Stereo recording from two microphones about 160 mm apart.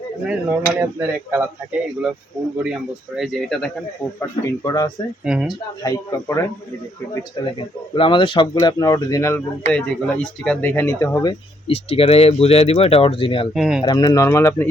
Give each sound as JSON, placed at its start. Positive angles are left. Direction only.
{"t": 0.3, "sound": "speech", "side_deg": -10}
{"t": 2.6, "sound": "speech", "side_deg": -5}
{"t": 4.2, "sound": "speech", "side_deg": 20}
{"t": 5.2, "sound": "speech", "side_deg": -5}
{"t": 5.8, "sound": "speech", "side_deg": 20}
{"t": 7.9, "sound": "speech", "side_deg": 35}
{"t": 9.7, "sound": "speech", "side_deg": 5}
{"t": 11.7, "sound": "speech", "side_deg": 40}
{"t": 13.5, "sound": "speech", "side_deg": 0}
{"t": 13.8, "sound": "speech", "side_deg": 25}